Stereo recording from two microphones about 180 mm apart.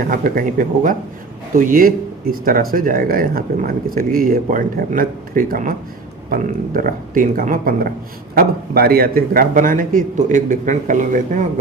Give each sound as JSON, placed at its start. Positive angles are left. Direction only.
{"t": 0.1, "sound": "speech", "side_deg": -50}